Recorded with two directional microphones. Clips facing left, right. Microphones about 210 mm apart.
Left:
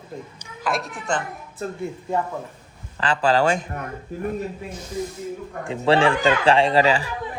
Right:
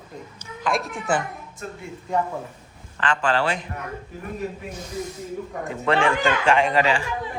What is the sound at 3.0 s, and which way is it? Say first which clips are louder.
Speech: left 3 dB; 35° left (ahead or behind).